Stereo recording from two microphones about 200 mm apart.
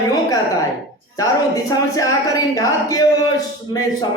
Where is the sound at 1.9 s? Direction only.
15° left (ahead or behind).